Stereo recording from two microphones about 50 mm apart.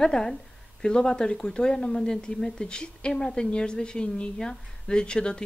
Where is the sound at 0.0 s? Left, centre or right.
Centre.